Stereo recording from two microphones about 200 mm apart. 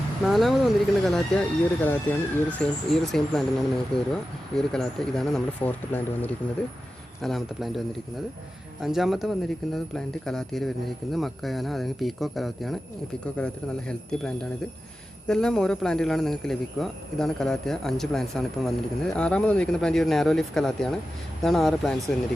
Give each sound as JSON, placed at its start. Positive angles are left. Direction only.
{"t": 0.3, "sound": "speech", "side_deg": 0}
{"t": 8.8, "sound": "speech", "side_deg": 0}